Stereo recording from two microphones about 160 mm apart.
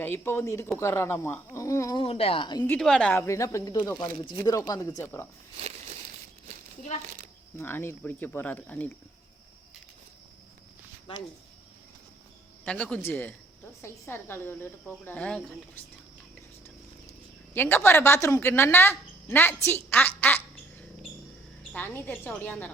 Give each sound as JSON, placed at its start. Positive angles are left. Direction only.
{"t": 0.0, "sound": "speech", "side_deg": 15}
{"t": 2.0, "sound": "speech", "side_deg": 40}
{"t": 2.6, "sound": "speech", "side_deg": 5}
{"t": 7.6, "sound": "speech", "side_deg": 15}
{"t": 12.6, "sound": "speech", "side_deg": 5}
{"t": 17.5, "sound": "speech", "side_deg": 15}
{"t": 21.7, "sound": "speech", "side_deg": 10}